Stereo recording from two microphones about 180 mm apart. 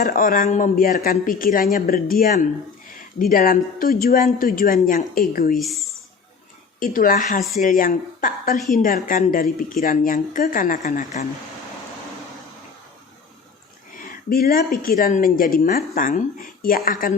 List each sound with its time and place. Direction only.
0.0 s speech: 50° left (ahead or behind)
5.5 s speech: centre (ahead or behind)
6.7 s speech: 50° left (ahead or behind)
14.0 s speech: 55° left (ahead or behind)